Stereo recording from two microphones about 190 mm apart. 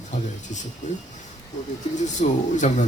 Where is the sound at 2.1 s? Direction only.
40° left (ahead or behind).